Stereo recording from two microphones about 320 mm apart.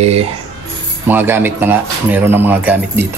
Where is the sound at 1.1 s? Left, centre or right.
Centre.